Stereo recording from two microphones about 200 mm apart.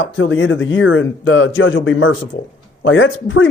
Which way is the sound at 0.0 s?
75° left (ahead or behind).